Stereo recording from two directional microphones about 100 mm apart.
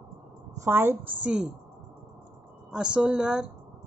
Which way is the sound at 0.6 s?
25° right (ahead or behind).